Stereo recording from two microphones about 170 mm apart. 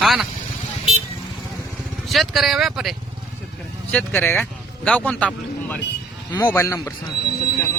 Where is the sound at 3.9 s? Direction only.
10° left (ahead or behind).